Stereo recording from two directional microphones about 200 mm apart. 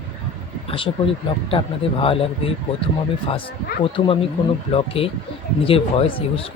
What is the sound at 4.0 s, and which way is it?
Speech, 30° left (ahead or behind).